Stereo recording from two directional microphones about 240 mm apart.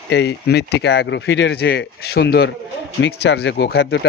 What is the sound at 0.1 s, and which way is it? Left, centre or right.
Speech, left.